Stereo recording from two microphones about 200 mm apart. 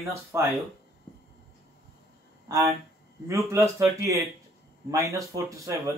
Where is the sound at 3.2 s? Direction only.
15° right (ahead or behind).